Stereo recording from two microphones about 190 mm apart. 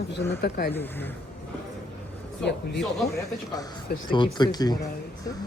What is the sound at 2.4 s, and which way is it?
Speech, 60° left (ahead or behind).